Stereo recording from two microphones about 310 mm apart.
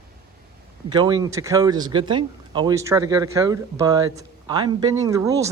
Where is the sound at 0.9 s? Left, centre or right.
Centre.